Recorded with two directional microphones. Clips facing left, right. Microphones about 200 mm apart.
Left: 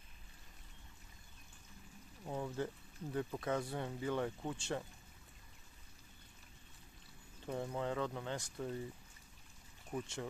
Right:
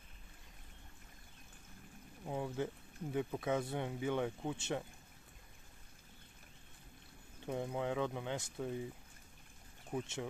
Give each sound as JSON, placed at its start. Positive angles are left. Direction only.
{"t": 2.2, "sound": "speech", "side_deg": -15}
{"t": 4.6, "sound": "speech", "side_deg": -20}
{"t": 7.4, "sound": "speech", "side_deg": -15}
{"t": 9.8, "sound": "speech", "side_deg": -20}